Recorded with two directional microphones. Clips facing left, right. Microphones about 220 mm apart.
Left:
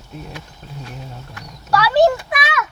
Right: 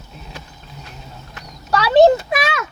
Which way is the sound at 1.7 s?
20° right (ahead or behind).